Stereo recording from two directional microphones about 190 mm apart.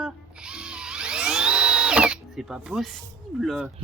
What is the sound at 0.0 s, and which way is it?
Music, 5° right (ahead or behind).